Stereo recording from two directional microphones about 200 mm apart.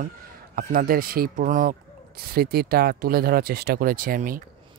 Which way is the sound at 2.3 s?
50° right (ahead or behind).